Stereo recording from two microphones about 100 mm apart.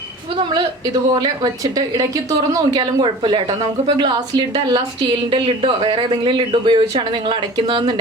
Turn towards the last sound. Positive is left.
turn(degrees=-50)  # may be behind; listen again after turning